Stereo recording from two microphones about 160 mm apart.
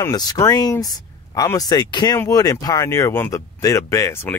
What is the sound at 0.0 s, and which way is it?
Speech, 25° left (ahead or behind).